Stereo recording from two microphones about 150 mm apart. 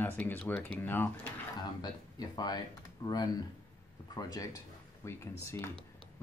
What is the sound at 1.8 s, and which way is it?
Speech, 25° left (ahead or behind).